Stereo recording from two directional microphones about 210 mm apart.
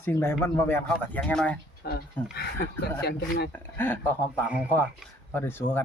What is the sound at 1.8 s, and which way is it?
Speech, 50° left (ahead or behind).